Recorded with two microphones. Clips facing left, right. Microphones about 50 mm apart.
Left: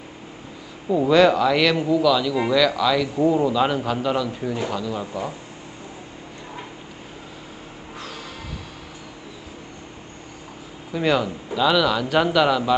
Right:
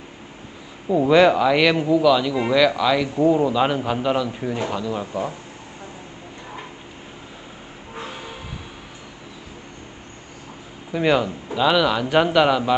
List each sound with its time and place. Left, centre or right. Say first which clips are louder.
0.8 s speech: right 1 dB; centre
7.9 s train: right 3 dB; right
10.9 s speech: right 2 dB; centre